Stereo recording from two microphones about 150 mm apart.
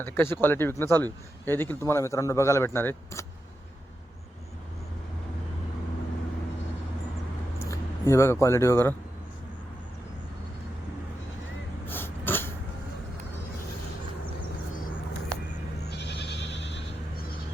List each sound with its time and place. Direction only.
0.0 s speech: 15° left (ahead or behind)
7.7 s speech: 20° left (ahead or behind)
11.9 s a sound: 15° left (ahead or behind)